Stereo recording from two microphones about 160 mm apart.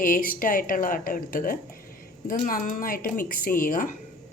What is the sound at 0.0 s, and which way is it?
Speech, 60° left (ahead or behind).